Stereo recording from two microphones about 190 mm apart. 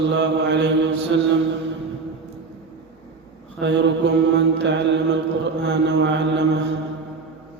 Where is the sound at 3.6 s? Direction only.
70° right (ahead or behind).